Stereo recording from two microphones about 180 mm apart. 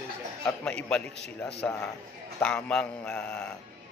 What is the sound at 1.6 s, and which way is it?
Speech, 5° left (ahead or behind).